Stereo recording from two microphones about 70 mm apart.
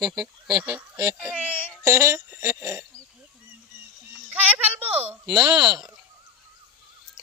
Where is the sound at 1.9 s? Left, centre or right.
Right.